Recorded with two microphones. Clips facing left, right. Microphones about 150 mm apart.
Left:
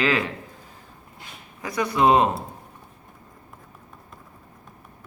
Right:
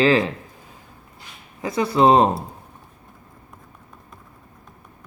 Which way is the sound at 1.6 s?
25° right (ahead or behind).